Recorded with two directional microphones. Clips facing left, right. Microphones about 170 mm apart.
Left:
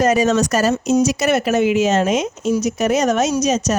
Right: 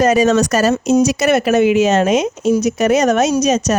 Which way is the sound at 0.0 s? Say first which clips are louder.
Right 3 dB; 85° right.